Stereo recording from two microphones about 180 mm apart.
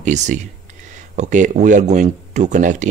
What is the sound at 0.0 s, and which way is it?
Speech, 40° right (ahead or behind).